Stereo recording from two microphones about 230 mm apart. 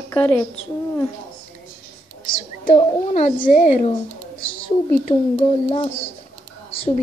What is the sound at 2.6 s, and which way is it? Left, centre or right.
A child's voice, left.